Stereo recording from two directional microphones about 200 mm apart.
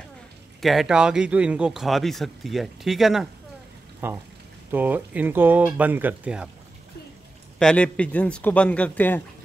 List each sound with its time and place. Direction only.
0.6 s a man's voice: centre (ahead or behind)
7.5 s speech: 5° left (ahead or behind)